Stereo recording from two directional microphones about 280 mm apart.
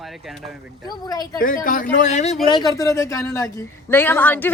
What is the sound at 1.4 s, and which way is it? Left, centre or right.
A man's voice, left.